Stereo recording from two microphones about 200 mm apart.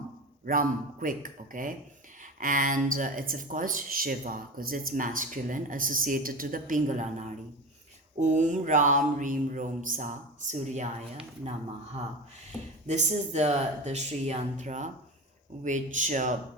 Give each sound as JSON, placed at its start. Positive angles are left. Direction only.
{"t": 0.4, "sound": "speech", "side_deg": -45}
{"t": 8.2, "sound": "mantra", "side_deg": -35}
{"t": 12.9, "sound": "mantra", "side_deg": -35}